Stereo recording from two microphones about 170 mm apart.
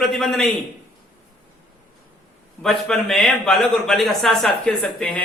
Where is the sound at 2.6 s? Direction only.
5° left (ahead or behind).